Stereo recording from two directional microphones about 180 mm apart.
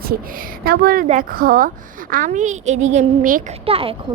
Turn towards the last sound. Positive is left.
turn(degrees=-30)  # may be behind; listen again after turning